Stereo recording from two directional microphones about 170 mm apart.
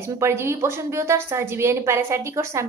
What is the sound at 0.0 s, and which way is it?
A woman's voice, 15° right (ahead or behind).